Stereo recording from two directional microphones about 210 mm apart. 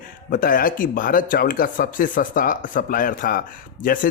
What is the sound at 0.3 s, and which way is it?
A man's voice, 40° left (ahead or behind).